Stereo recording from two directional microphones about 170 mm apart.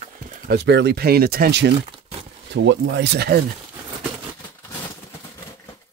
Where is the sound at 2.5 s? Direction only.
90° right; by 3.4 s 70° right (ahead or behind).